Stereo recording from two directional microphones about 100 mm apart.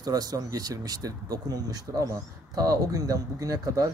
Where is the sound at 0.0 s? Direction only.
40° right (ahead or behind).